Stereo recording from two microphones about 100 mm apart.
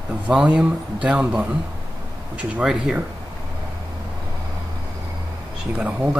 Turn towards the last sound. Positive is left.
turn(degrees=-15)  # may be behind; listen again after turning